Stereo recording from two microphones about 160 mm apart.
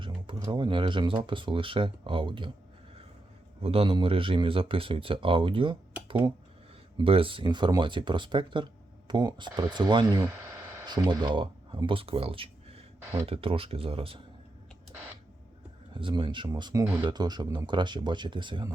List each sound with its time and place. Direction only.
0.3 s speech: 25° right (ahead or behind)
3.6 s speech: 35° right (ahead or behind)
6.9 s speech: 35° right (ahead or behind)
16.0 s speech: 30° right (ahead or behind)